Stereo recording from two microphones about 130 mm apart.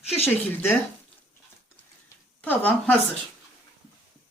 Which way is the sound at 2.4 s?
10° left (ahead or behind).